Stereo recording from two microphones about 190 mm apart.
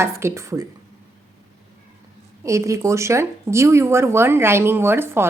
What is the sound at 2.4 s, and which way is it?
A woman's voice, 15° right (ahead or behind).